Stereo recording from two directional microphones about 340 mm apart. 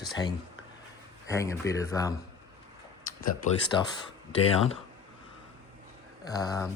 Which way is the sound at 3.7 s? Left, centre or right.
Centre.